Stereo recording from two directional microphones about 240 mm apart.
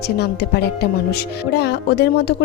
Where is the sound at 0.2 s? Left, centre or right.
Left.